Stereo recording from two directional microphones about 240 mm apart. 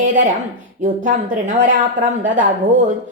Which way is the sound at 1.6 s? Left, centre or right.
Right.